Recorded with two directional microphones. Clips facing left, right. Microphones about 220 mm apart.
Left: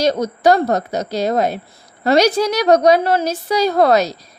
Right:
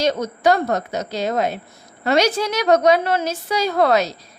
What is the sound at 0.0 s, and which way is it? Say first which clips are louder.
A woman's voice: left 3 dB; 35° left (ahead or behind).